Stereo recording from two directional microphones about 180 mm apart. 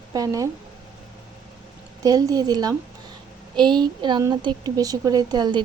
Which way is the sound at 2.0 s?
20° right (ahead or behind).